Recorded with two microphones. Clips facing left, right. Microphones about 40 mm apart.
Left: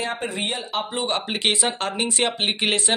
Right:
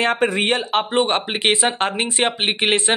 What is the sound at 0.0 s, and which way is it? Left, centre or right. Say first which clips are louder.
Speech: right 8 dB; right.